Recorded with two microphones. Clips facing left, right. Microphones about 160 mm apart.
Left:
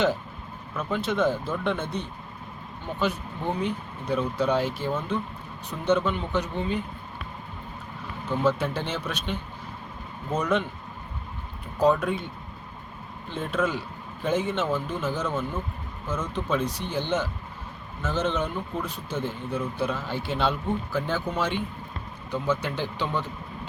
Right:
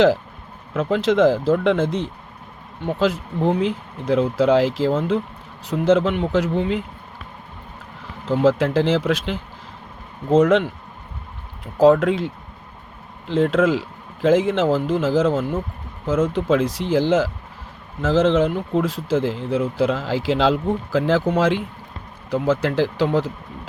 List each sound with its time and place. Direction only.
0.7 s speech: 90° right
8.3 s speech: 90° right
11.8 s speech: 90° right